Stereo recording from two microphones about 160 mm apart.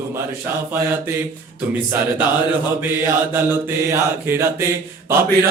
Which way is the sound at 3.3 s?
15° right (ahead or behind).